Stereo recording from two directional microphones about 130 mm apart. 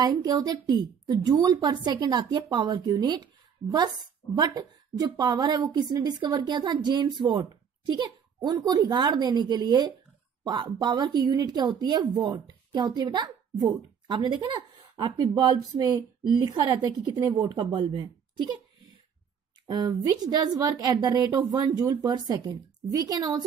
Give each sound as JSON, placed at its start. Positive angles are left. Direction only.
{"t": 0.0, "sound": "a woman's voice", "side_deg": -30}
{"t": 19.7, "sound": "a woman's voice", "side_deg": -30}